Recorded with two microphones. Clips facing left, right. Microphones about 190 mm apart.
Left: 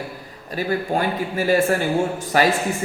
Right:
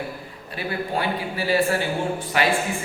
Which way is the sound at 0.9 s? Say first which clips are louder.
Left 3 dB; 45° left (ahead or behind).